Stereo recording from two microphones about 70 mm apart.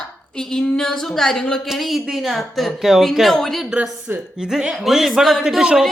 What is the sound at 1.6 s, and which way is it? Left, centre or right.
A woman's voice, centre.